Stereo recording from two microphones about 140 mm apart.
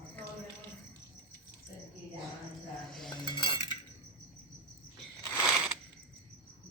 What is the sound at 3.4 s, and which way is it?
Cutlery, 35° left (ahead or behind).